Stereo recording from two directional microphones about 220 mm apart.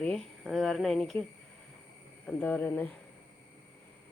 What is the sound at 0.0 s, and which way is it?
Speech, centre (ahead or behind).